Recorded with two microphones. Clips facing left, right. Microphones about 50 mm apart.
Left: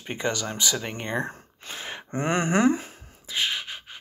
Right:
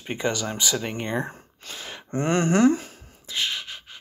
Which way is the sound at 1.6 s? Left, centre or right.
Left.